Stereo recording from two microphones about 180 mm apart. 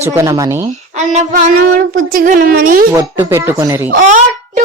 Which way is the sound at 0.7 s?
45° right (ahead or behind).